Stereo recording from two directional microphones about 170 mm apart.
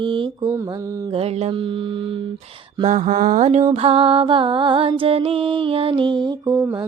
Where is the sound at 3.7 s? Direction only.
35° right (ahead or behind); by 6.7 s 20° right (ahead or behind).